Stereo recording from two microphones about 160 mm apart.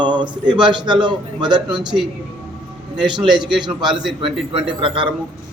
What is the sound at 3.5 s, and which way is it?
A man's voice, 30° right (ahead or behind).